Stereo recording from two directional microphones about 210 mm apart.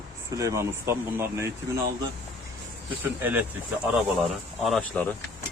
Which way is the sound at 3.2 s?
10° right (ahead or behind).